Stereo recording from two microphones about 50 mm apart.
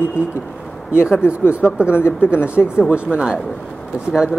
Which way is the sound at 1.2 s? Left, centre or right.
Left.